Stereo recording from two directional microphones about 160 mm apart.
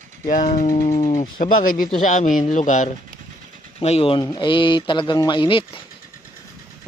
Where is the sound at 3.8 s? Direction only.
40° left (ahead or behind).